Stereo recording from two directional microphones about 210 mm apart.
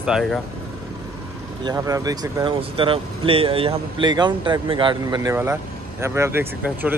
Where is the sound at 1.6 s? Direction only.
15° right (ahead or behind).